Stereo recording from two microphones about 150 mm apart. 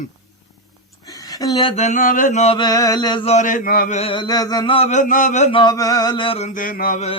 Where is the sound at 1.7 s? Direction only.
50° left (ahead or behind).